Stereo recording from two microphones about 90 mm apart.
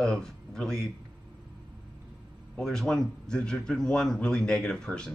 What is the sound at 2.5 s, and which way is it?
Speech, 5° left (ahead or behind).